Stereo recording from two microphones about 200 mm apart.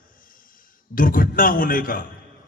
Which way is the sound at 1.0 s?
45° left (ahead or behind).